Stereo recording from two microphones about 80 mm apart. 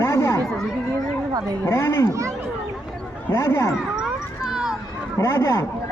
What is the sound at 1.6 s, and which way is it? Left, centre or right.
Speech, left.